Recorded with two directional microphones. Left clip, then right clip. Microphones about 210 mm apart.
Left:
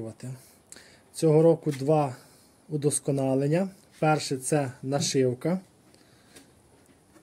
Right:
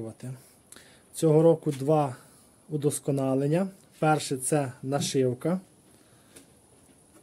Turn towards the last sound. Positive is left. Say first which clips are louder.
# left 1 dB
turn(degrees=0)  # may be behind; listen again after turning